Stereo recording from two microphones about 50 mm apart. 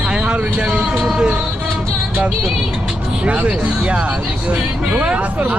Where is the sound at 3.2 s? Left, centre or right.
Right.